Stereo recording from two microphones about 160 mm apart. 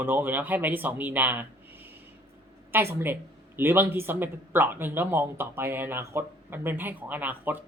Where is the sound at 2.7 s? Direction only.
15° right (ahead or behind).